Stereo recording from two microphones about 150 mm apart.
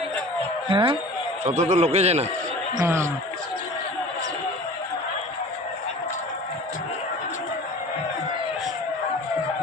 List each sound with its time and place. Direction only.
0.7 s speech: 30° right (ahead or behind)
1.5 s a man's voice: 50° right (ahead or behind)
2.8 s speech: 15° right (ahead or behind)